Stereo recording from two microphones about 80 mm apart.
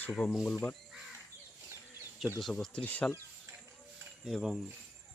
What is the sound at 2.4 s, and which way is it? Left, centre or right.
Speech, centre.